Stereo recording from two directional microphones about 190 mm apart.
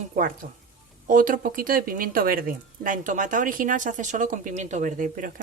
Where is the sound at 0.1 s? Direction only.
45° right (ahead or behind).